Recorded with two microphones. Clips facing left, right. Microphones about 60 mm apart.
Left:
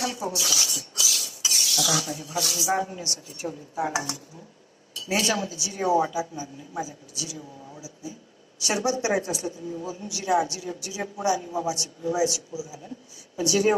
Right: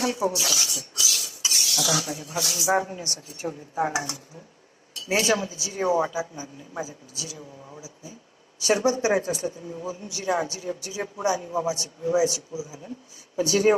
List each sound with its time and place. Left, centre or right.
0.0 s speech: right
1.2 s rub: right
2.4 s a man's voice: right
3.0 s a woman's voice: right
5.0 s a woman's voice: right